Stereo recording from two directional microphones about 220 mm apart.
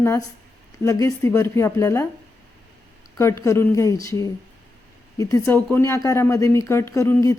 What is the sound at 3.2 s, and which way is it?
A woman's voice, 10° left (ahead or behind).